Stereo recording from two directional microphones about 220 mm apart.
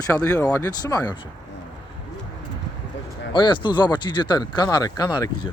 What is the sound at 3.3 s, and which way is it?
Speech, 20° left (ahead or behind).